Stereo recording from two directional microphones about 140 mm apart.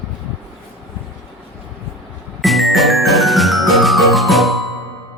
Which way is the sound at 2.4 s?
Centre (ahead or behind).